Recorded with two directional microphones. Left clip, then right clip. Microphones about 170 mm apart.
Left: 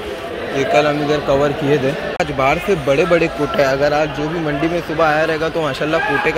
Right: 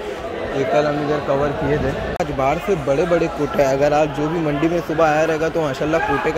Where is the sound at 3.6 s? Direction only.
25° right (ahead or behind).